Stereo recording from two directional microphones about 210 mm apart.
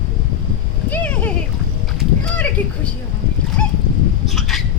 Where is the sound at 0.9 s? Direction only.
10° left (ahead or behind).